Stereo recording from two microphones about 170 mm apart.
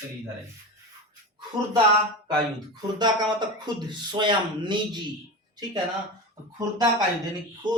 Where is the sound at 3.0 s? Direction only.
25° right (ahead or behind).